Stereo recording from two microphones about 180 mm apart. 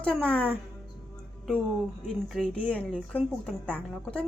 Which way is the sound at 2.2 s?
Centre (ahead or behind).